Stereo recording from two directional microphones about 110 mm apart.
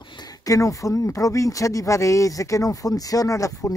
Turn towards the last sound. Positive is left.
turn(degrees=30)  # may be behind; listen again after turning